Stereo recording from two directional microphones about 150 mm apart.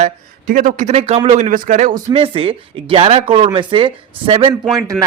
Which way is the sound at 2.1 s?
40° right (ahead or behind).